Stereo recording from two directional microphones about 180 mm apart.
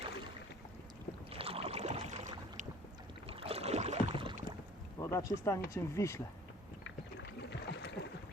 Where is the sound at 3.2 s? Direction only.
35° right (ahead or behind).